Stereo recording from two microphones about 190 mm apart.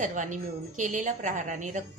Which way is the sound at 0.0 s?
40° right (ahead or behind).